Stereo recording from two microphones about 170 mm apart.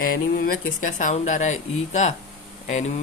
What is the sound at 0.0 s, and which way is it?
Speech, 60° left (ahead or behind).